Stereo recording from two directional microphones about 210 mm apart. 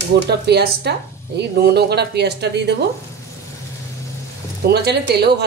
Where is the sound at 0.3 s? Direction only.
50° right (ahead or behind).